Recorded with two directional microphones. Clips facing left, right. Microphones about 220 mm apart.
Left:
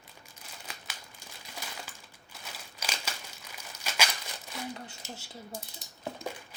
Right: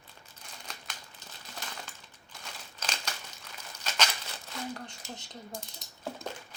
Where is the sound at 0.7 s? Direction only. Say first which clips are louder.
Even; 10° left (ahead or behind).